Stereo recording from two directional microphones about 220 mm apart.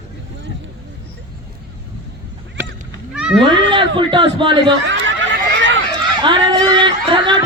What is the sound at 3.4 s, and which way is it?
Speech, 20° right (ahead or behind).